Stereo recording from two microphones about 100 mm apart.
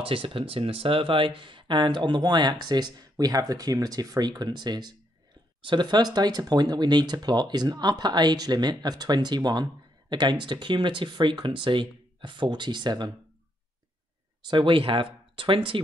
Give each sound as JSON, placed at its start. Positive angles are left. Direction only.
{"t": 0.0, "sound": "speech", "side_deg": -65}
{"t": 14.5, "sound": "speech", "side_deg": -60}